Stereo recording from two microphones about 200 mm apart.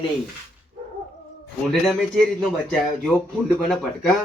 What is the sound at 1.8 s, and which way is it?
Speech, centre (ahead or behind).